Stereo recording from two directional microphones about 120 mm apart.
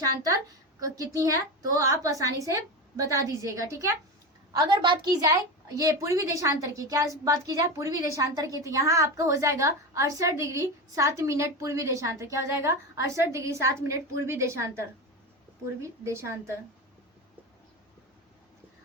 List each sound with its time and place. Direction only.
0.8 s a woman's voice: 30° right (ahead or behind)
4.5 s a woman's voice: 40° right (ahead or behind)
5.2 s a woman's voice: 25° right (ahead or behind)